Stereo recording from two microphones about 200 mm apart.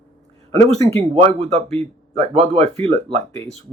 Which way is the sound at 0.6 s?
35° right (ahead or behind).